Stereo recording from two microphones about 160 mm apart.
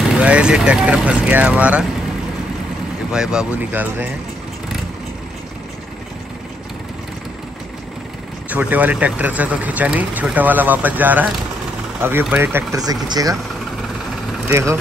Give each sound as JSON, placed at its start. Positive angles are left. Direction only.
{"t": 0.0, "sound": "speech", "side_deg": -5}
{"t": 3.1, "sound": "speech", "side_deg": -5}
{"t": 8.5, "sound": "speech", "side_deg": -10}
{"t": 12.7, "sound": "speech", "side_deg": -25}
{"t": 14.5, "sound": "speech", "side_deg": -15}